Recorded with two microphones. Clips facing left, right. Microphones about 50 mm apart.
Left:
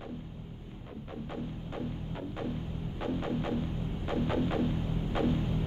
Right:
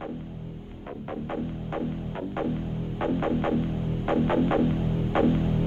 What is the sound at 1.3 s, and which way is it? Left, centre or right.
Music, right.